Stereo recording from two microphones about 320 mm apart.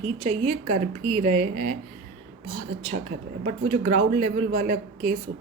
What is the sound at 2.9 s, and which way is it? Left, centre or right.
A woman's voice, right.